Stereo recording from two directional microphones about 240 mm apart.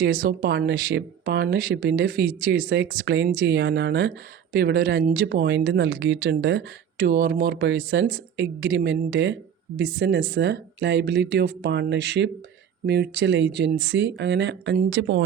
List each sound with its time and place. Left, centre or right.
0.0 s speech: right